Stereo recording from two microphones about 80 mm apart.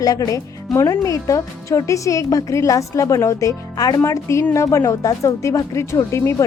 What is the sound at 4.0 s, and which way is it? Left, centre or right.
A woman's voice, left.